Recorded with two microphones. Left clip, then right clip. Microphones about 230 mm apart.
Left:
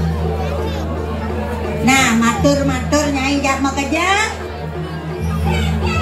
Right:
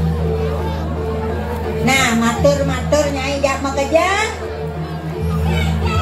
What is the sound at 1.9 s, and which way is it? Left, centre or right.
Music, left.